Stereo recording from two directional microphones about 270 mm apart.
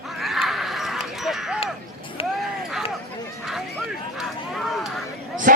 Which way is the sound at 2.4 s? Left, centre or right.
Centre.